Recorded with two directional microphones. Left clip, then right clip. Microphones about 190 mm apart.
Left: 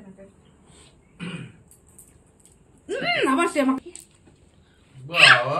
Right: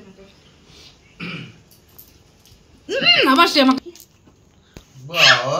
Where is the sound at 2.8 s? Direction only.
45° right (ahead or behind).